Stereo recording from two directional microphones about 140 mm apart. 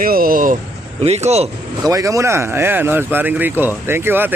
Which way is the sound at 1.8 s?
25° right (ahead or behind).